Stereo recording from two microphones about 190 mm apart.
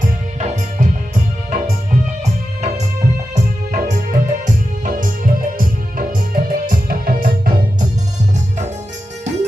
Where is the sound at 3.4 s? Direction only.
40° right (ahead or behind).